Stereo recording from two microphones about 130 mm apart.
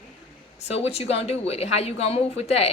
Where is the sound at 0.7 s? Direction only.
50° left (ahead or behind).